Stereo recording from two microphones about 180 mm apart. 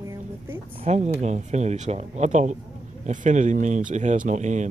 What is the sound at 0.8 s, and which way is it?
Speech, 40° right (ahead or behind).